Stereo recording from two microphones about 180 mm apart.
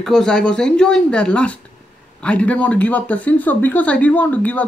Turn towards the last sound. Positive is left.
turn(degrees=10)  # may be behind; listen again after turning